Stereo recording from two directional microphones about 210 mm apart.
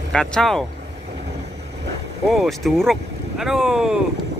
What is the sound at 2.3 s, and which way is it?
Speech, centre (ahead or behind).